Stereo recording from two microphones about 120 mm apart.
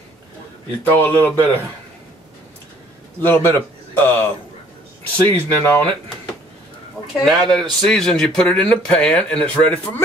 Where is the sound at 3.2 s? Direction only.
15° left (ahead or behind).